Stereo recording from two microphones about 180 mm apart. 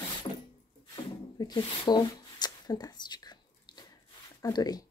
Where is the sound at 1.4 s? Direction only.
25° left (ahead or behind).